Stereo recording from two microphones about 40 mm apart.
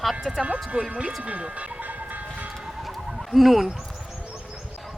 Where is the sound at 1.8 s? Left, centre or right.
Right.